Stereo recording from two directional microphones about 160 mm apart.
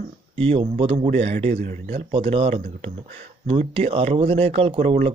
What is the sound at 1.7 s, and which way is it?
Speech, 50° right (ahead or behind).